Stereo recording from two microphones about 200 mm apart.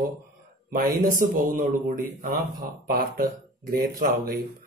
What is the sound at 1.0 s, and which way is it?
Speech, 45° right (ahead or behind).